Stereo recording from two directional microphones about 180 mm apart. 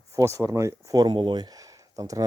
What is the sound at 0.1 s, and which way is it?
Speech, 15° right (ahead or behind).